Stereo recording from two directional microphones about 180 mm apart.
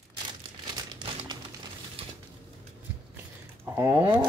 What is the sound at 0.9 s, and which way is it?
Crumpling, 25° right (ahead or behind).